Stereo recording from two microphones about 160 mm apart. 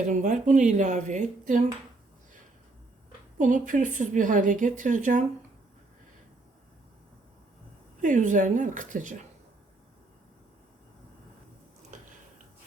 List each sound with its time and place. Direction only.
0.1 s a woman's voice: 50° right (ahead or behind)
3.3 s a woman's voice: 55° right (ahead or behind)
8.0 s a woman's voice: 55° right (ahead or behind)